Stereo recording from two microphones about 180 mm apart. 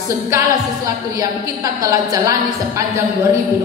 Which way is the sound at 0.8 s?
20° right (ahead or behind).